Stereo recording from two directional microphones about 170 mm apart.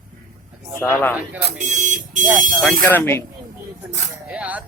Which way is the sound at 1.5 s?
45° right (ahead or behind).